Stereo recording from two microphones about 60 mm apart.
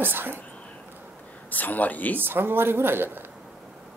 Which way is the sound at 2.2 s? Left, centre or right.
Right.